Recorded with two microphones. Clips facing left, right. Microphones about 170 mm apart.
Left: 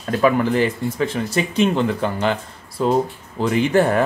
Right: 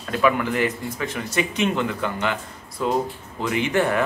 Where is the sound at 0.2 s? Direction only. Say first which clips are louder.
Left 4 dB; 35° left (ahead or behind).